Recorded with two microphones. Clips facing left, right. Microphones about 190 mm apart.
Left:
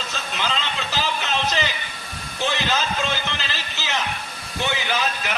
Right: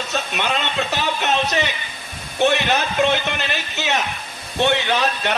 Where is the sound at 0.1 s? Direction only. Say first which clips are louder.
Right 5 dB; 65° right (ahead or behind).